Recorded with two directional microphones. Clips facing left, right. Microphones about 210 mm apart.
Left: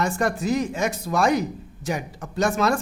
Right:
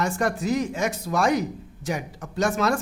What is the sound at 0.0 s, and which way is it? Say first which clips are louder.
Speech: left 1 dB; 30° left (ahead or behind).